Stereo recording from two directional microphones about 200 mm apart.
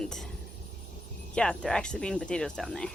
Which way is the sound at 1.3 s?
5° left (ahead or behind).